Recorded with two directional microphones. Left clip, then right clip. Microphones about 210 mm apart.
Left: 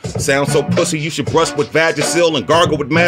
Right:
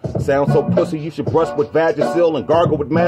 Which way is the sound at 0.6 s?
55° left (ahead or behind).